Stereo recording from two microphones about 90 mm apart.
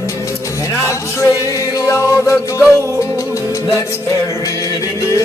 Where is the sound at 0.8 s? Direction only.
30° left (ahead or behind).